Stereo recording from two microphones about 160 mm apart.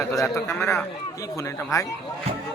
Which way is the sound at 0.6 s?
5° left (ahead or behind).